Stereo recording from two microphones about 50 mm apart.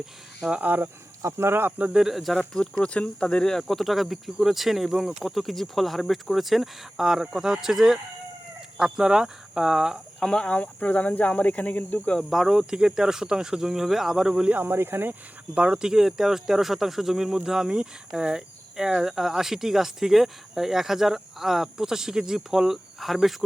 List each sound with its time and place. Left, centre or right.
0.6 s speech: right
1.2 s speech: right
2.0 s speech: centre
2.4 s speech: centre
10.2 s speech: centre; by 12.1 s left
12.3 s speech: centre
14.5 s speech: right
15.5 s speech: centre